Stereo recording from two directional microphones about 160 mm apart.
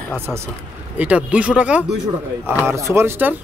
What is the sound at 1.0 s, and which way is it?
Speech, 10° right (ahead or behind).